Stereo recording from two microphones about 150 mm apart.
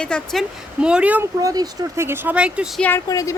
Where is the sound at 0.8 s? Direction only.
5° right (ahead or behind).